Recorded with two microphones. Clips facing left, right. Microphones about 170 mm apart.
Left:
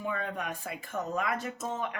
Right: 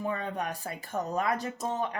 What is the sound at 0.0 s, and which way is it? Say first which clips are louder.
Speech: right 2 dB; 35° right (ahead or behind).